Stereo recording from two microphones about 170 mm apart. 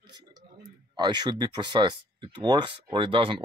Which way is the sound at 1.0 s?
25° right (ahead or behind).